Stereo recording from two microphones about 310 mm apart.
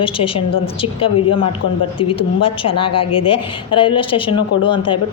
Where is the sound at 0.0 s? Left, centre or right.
Centre.